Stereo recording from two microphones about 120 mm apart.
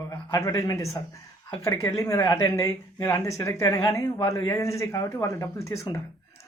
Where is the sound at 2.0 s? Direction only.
25° left (ahead or behind).